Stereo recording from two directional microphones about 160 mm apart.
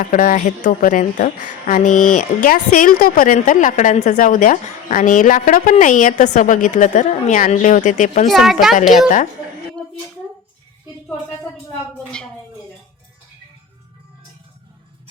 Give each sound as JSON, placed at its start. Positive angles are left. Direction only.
{"t": 0.0, "sound": "a woman's voice", "side_deg": 55}
{"t": 8.3, "sound": "speech", "side_deg": 0}